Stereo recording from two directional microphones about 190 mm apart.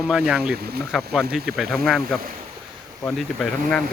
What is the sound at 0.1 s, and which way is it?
Speech, 5° right (ahead or behind).